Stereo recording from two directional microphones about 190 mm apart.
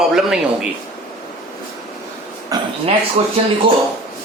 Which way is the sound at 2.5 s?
20° right (ahead or behind).